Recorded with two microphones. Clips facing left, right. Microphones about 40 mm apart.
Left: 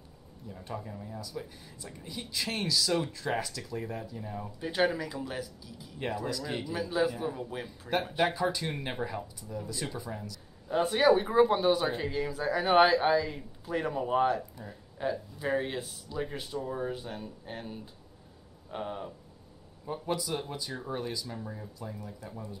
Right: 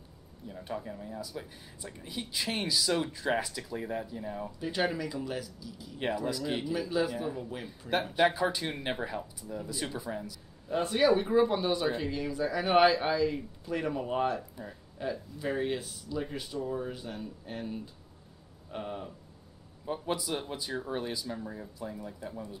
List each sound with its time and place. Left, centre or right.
0.5 s speech: centre
4.6 s speech: centre
6.2 s speech: centre
6.7 s a man's voice: centre
7.8 s speech: left
8.2 s a man's voice: centre
10.7 s speech: centre
15.0 s speech: centre
19.9 s speech: centre